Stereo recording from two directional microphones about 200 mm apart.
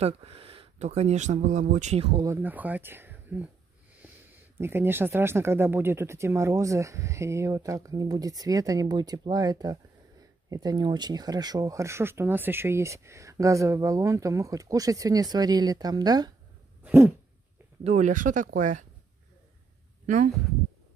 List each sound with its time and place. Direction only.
0.0 s speech: 30° right (ahead or behind)
2.2 s speech: 10° right (ahead or behind)
4.6 s speech: 10° right (ahead or behind)
16.8 s dog: 10° right (ahead or behind)
17.8 s speech: 40° right (ahead or behind)